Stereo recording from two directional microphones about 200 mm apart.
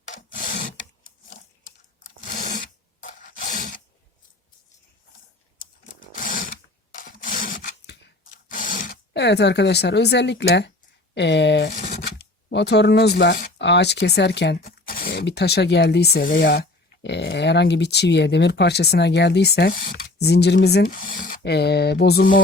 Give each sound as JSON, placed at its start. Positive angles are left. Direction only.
{"t": 0.1, "sound": "wood", "side_deg": 40}
{"t": 2.0, "sound": "a sound", "side_deg": 40}
{"t": 6.0, "sound": "a sound", "side_deg": 45}
{"t": 7.0, "sound": "rub", "side_deg": 45}
{"t": 8.4, "sound": "speech", "side_deg": 45}
{"t": 20.1, "sound": "speech", "side_deg": 55}